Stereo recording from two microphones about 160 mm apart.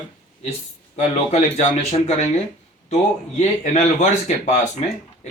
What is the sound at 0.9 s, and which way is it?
Speech, 45° left (ahead or behind).